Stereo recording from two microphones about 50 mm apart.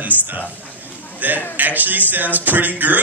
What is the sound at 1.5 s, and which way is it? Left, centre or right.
A man's voice, right.